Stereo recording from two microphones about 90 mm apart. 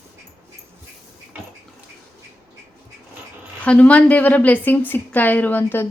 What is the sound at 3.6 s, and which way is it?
A woman's voice, 15° left (ahead or behind).